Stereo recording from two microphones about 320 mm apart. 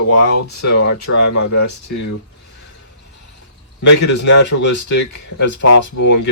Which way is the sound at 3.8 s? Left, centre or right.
Left.